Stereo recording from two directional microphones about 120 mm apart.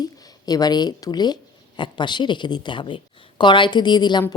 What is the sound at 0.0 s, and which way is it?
A woman's voice, 30° left (ahead or behind).